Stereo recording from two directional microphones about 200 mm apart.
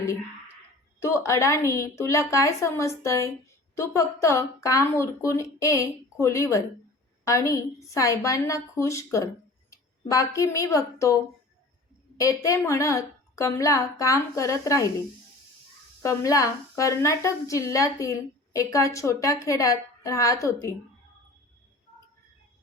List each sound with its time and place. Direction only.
1.0 s a woman's voice: 15° left (ahead or behind)
16.0 s a woman's voice: 15° left (ahead or behind)